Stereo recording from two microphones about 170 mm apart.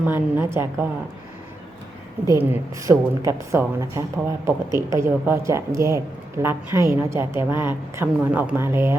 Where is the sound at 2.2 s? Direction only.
15° right (ahead or behind).